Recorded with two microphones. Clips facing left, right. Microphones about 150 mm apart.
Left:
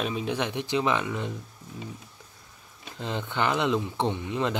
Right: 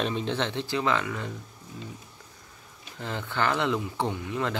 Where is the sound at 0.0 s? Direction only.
10° left (ahead or behind).